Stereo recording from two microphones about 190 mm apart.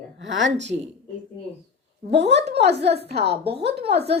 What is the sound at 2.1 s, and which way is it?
Speech, 65° right (ahead or behind).